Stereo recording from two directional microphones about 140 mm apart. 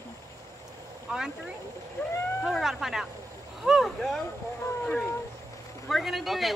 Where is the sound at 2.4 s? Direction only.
Centre (ahead or behind).